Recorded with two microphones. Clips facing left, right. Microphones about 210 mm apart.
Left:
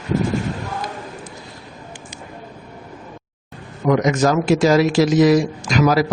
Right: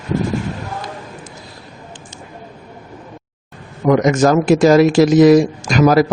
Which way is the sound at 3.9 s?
50° right (ahead or behind).